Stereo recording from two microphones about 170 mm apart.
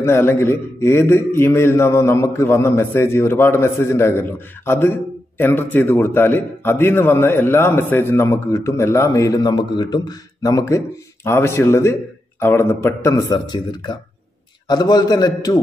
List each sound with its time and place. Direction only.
0.0 s a man's voice: 15° left (ahead or behind)